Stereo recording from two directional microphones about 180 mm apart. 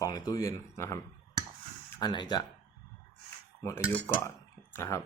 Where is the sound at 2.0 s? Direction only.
25° left (ahead or behind).